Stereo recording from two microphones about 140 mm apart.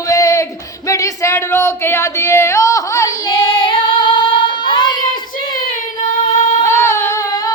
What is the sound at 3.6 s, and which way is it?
Child singing, 35° left (ahead or behind).